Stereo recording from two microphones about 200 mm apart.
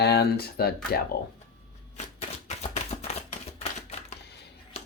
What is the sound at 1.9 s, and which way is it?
Typewriter, 35° left (ahead or behind).